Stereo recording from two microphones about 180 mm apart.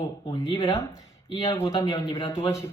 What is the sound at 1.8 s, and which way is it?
Speech, 15° left (ahead or behind).